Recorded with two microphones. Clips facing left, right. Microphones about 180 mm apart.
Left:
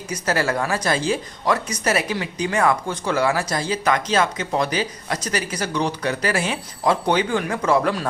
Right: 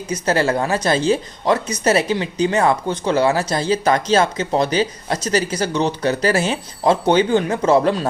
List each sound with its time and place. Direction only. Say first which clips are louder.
0.1 s speech: right 4 dB; 25° right (ahead or behind)